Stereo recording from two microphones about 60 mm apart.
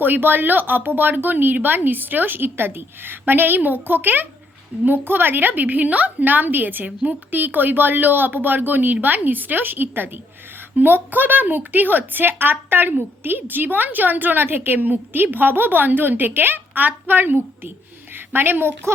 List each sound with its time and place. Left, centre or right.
0.0 s a woman's voice: right